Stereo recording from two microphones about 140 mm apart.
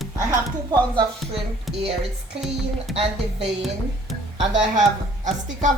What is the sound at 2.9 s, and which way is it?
Speech, 45° right (ahead or behind).